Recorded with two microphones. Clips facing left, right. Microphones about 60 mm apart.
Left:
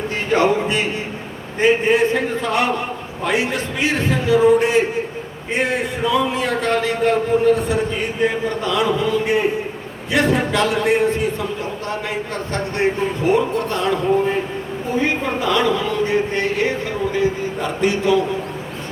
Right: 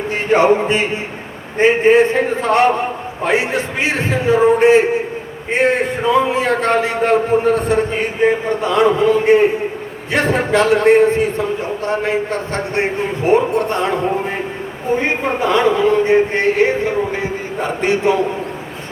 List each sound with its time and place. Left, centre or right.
0.1 s speech: right
1.5 s a man's voice: right